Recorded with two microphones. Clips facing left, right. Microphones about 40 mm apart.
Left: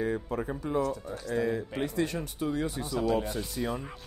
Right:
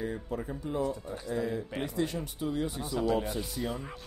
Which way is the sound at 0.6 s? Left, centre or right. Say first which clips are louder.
Left 2 dB; left.